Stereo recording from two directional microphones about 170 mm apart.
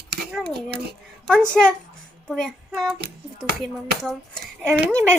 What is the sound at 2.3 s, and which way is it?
Child singing, centre (ahead or behind).